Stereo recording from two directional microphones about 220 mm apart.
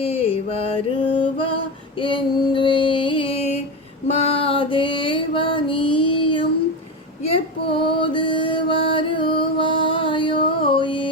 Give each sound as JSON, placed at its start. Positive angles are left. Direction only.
{"t": 0.0, "sound": "mantra", "side_deg": 25}
{"t": 2.0, "sound": "female singing", "side_deg": 20}
{"t": 4.2, "sound": "music", "side_deg": 25}